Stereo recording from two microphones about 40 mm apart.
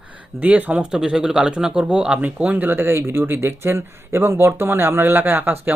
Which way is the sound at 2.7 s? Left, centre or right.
Right.